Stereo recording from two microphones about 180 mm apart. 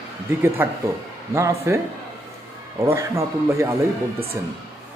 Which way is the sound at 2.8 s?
15° right (ahead or behind).